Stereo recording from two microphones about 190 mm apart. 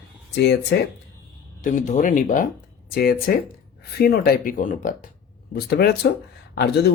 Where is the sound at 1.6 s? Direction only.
40° left (ahead or behind).